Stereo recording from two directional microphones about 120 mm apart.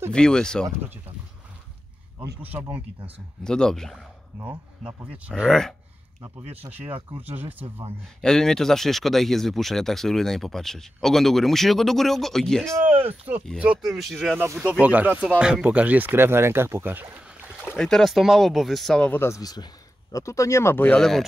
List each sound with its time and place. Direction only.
0.1 s speech: 5° left (ahead or behind)
3.4 s speech: 5° left (ahead or behind)
4.4 s speech: 10° right (ahead or behind)
5.5 s speech: 5° left (ahead or behind)
6.5 s speech: 15° right (ahead or behind)
8.2 s speech: 5° left (ahead or behind)
12.9 s speech: 15° right (ahead or behind); by 14.4 s centre (ahead or behind)
14.6 s speech: 10° right (ahead or behind)
17.7 s speech: 5° left (ahead or behind)
19.4 s speech: 35° left (ahead or behind); by 21.0 s 15° left (ahead or behind)
21.0 s speech: centre (ahead or behind)